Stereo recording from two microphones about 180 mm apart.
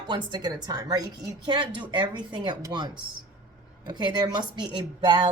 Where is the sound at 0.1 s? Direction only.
25° right (ahead or behind).